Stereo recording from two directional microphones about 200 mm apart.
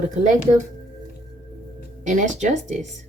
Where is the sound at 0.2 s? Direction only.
40° right (ahead or behind).